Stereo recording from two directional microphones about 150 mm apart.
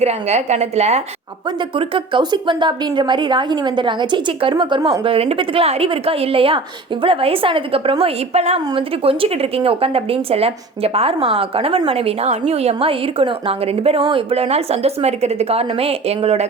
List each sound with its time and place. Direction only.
0.0 s a woman's voice: 45° right (ahead or behind)
1.7 s a woman's voice: 35° right (ahead or behind)